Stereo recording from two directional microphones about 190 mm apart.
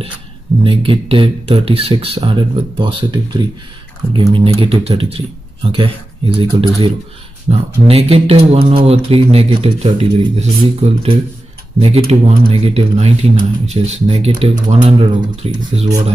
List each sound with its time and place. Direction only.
0.7 s speech: 30° right (ahead or behind)